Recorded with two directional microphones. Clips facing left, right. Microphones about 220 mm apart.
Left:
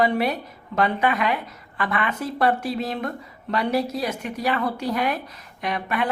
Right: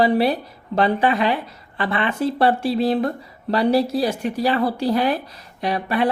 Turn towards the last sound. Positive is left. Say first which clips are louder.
# right 5 dB
turn(degrees=-30)  # may be behind; listen again after turning